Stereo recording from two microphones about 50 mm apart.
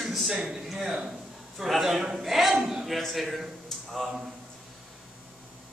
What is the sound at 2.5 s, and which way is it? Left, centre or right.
Speech, centre.